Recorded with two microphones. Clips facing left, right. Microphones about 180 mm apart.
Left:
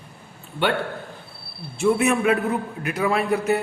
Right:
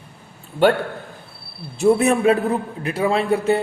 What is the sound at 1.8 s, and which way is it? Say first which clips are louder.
A man's voice: right 4 dB; 35° right (ahead or behind).